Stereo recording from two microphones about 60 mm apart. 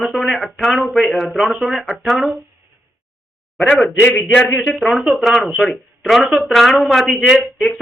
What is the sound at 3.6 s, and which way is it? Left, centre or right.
Speech, centre.